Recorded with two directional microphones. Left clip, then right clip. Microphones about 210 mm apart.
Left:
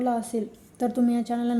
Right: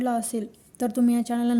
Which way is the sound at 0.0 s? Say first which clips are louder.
Even; 45° right (ahead or behind).